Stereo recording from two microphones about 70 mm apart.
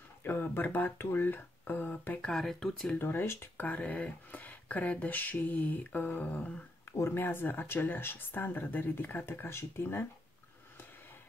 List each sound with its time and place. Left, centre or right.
0.2 s a sound: left
0.9 s speech: left
2.2 s speech: centre
3.0 s speech: left
6.9 s speech: left